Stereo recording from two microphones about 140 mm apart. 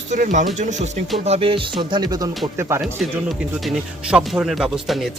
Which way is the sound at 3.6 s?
5° right (ahead or behind).